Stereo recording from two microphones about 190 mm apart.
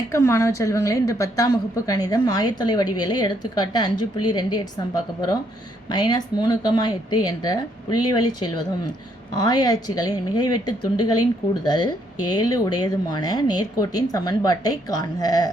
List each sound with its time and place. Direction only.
0.1 s a woman's voice: 15° left (ahead or behind)
5.9 s a woman's voice: 20° left (ahead or behind)